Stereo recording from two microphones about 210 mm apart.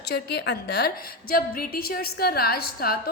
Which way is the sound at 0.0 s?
50° left (ahead or behind).